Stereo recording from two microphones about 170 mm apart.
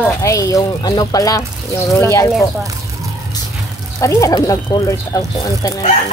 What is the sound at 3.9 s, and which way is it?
Speech, 20° left (ahead or behind).